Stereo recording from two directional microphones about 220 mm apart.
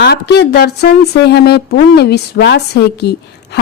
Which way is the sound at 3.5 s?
50° left (ahead or behind).